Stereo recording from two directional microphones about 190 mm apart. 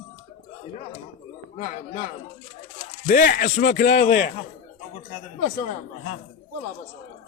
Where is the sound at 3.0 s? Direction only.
45° left (ahead or behind).